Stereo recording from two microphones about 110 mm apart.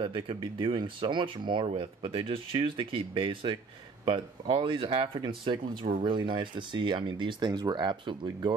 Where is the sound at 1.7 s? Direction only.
60° right (ahead or behind).